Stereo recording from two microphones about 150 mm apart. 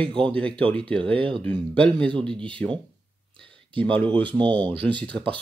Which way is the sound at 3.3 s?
5° left (ahead or behind).